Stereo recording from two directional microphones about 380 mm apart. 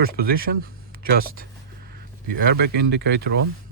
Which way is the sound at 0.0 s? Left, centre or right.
Right.